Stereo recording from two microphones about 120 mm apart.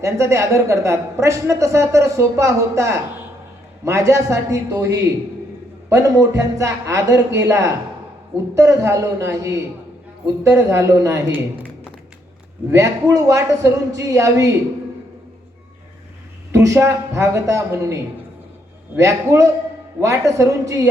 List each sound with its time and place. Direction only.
0.0 s a woman's voice: 25° right (ahead or behind)
12.7 s a woman's voice: 25° right (ahead or behind)
16.5 s a woman's voice: 25° right (ahead or behind)